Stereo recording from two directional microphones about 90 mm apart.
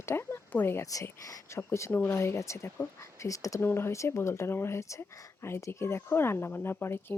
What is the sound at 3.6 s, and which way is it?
Speech, 25° left (ahead or behind).